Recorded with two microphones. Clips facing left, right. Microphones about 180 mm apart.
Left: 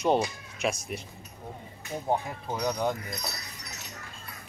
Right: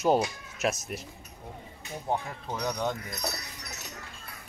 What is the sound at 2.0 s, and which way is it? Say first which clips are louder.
Speech: left 2 dB; 10° left (ahead or behind).